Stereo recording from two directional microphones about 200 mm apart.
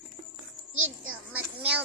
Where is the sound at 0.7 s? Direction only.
85° right.